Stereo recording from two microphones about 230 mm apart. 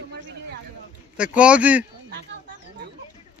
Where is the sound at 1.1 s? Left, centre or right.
Centre.